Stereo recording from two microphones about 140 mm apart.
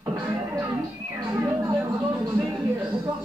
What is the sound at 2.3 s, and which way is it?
Music, 30° right (ahead or behind).